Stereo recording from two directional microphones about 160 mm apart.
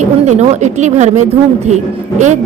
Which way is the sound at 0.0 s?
45° right (ahead or behind).